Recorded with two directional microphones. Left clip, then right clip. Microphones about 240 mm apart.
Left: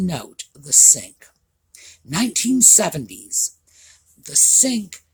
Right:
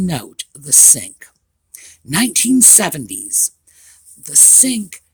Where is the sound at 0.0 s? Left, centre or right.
Right.